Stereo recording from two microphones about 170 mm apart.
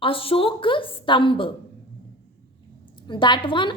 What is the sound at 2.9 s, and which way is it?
Speech, 25° left (ahead or behind).